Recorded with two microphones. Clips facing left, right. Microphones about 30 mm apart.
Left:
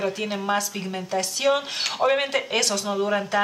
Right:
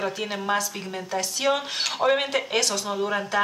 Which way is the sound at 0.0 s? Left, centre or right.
Centre.